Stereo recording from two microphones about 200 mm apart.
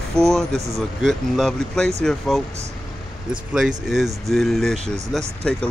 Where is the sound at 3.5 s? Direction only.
Centre (ahead or behind).